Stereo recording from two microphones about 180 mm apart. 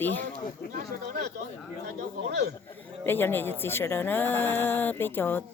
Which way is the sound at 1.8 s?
60° right (ahead or behind).